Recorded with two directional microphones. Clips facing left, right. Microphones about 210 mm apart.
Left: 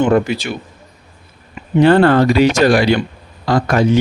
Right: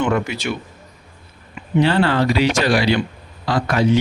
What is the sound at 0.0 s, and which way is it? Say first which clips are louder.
Speech: left 6 dB; 35° left (ahead or behind).